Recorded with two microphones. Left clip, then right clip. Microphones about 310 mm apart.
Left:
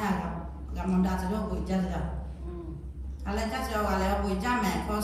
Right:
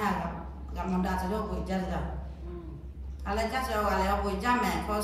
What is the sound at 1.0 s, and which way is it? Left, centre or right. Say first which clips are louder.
Speech: right 1 dB; right.